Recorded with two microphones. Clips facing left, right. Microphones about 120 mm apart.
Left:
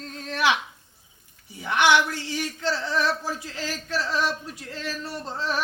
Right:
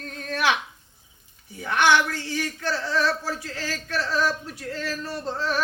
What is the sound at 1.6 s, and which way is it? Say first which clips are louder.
Speech: even; 15° left (ahead or behind).